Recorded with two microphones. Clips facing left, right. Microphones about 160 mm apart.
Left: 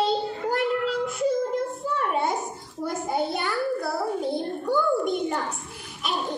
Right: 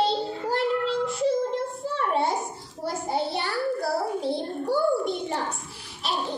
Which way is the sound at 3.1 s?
30° right (ahead or behind).